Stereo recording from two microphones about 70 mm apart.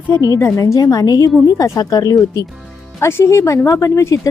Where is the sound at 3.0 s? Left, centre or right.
Left.